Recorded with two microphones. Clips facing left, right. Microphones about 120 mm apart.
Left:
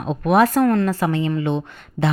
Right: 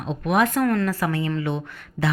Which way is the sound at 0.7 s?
25° left (ahead or behind).